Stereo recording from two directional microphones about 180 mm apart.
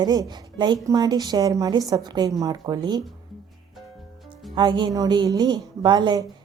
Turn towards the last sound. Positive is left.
turn(degrees=-20)  # may be behind; listen again after turning